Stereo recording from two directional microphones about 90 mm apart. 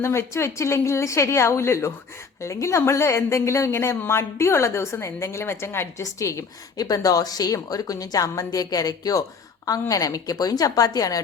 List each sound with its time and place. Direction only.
0.0 s a woman's voice: 30° left (ahead or behind)